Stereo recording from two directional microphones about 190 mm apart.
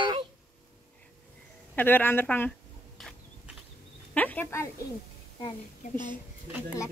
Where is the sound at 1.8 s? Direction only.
10° left (ahead or behind).